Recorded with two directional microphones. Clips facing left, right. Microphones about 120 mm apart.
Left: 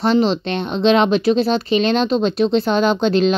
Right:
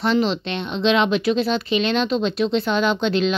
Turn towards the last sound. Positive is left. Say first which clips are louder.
# left 4 dB
turn(degrees=40)  # may be behind; listen again after turning